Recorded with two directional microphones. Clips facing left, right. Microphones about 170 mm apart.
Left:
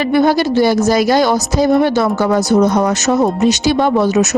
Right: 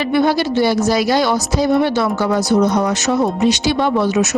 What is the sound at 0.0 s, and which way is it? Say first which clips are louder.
A woman's voice: left 3 dB; 45° left (ahead or behind).